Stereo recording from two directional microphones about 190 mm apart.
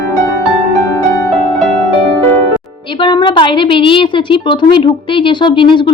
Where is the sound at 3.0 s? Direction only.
25° left (ahead or behind).